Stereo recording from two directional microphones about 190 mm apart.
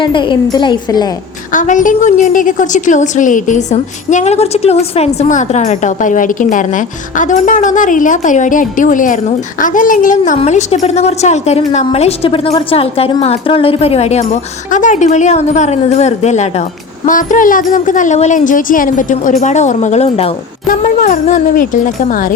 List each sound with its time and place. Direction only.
0.0 s speech: 25° left (ahead or behind)
1.5 s a woman's voice: 40° left (ahead or behind)